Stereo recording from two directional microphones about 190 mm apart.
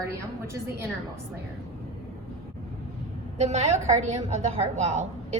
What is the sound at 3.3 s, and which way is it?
A woman's voice, 35° right (ahead or behind).